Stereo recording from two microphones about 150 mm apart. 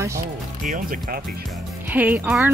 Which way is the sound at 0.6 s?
65° right (ahead or behind).